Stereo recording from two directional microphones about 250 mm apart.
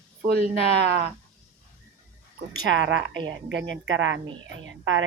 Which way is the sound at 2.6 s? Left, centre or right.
Right.